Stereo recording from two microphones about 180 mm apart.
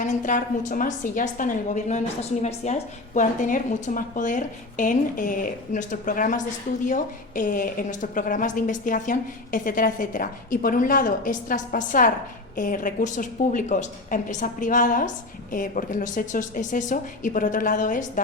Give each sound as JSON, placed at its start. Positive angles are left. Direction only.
{"t": 0.0, "sound": "a woman's voice", "side_deg": 45}